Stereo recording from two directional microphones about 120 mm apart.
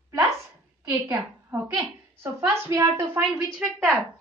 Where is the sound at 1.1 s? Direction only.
25° right (ahead or behind).